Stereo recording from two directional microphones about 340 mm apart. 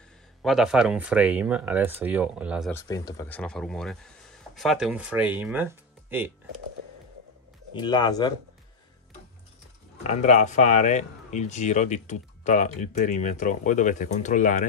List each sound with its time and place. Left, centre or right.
0.4 s speech: centre
2.7 s speech: centre
7.7 s speech: centre
10.0 s speech: centre